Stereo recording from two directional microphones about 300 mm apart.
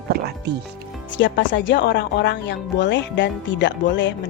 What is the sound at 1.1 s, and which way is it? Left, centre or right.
A woman's voice, left.